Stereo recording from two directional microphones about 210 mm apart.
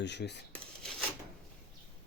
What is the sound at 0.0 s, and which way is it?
Cutlery, 55° left (ahead or behind).